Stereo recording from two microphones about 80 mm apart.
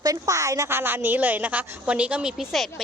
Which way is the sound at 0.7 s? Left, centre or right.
Right.